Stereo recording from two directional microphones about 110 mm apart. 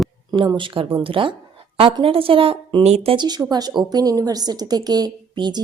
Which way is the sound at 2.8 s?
80° right.